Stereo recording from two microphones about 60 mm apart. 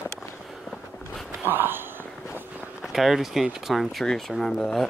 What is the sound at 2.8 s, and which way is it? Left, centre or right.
Speech, centre.